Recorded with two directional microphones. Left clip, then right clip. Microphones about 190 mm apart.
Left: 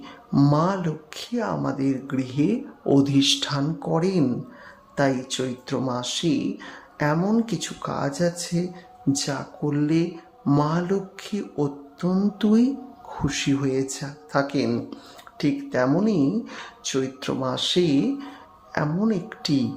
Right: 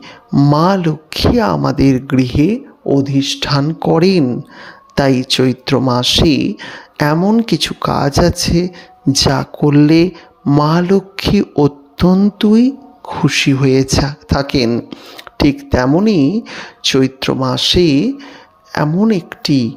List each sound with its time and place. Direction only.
0.3 s speech: 25° right (ahead or behind)
0.5 s speech: 40° right (ahead or behind)
2.8 s speech: 20° right (ahead or behind)
3.4 s a man's voice: 40° right (ahead or behind)
7.3 s a man's voice: 35° right (ahead or behind)
14.7 s speech: 30° right (ahead or behind)
15.4 s speech: 45° right (ahead or behind)